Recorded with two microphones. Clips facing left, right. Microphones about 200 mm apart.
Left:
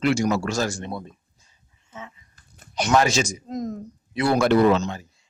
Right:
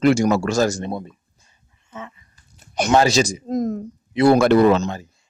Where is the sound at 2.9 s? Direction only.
30° right (ahead or behind).